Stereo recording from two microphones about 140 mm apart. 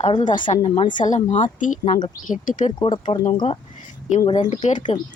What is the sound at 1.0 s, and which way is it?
Speech, 60° left (ahead or behind).